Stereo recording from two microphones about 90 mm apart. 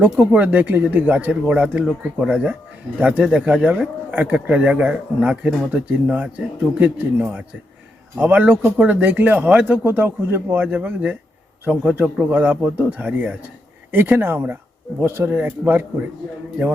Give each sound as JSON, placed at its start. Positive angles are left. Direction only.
{"t": 0.0, "sound": "speech", "side_deg": -15}